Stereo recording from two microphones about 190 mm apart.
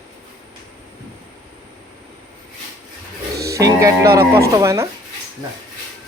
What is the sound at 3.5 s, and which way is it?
Music, 15° right (ahead or behind).